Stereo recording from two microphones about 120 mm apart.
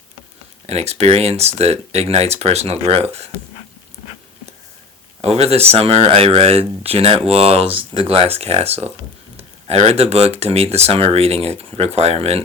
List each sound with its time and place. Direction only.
0.7 s speech: 60° right (ahead or behind)
5.2 s speech: 60° right (ahead or behind)